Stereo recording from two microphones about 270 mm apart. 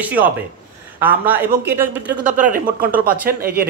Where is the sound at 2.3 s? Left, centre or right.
Right.